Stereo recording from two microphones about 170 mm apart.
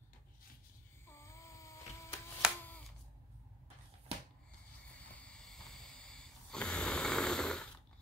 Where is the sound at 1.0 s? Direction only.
15° left (ahead or behind).